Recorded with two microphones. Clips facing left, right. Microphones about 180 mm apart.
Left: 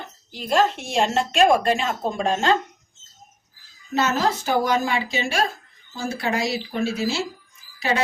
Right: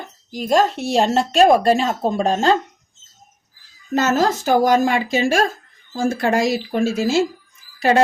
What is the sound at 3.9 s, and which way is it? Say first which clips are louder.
A woman's voice: right 4 dB; 45° right (ahead or behind).